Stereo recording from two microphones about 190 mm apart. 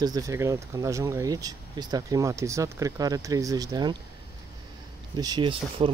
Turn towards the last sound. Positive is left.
turn(degrees=-30)  # may be behind; listen again after turning